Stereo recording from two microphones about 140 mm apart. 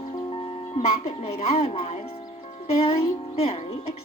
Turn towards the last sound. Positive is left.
turn(degrees=45)  # may be behind; listen again after turning